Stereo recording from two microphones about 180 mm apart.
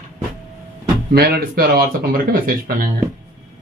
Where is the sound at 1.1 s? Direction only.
60° right (ahead or behind).